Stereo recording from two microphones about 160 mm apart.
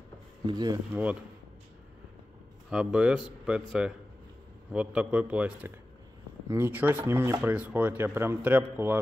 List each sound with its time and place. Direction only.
0.5 s speech: 25° right (ahead or behind)
2.7 s speech: 5° right (ahead or behind)